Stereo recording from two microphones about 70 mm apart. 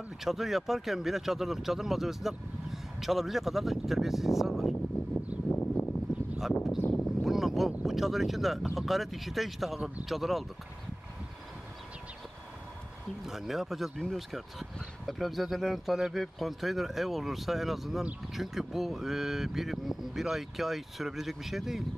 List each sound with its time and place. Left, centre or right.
0.2 s speech: centre
5.5 s a sound: left
6.8 s speech: left
7.2 s speech: centre
13.2 s speech: centre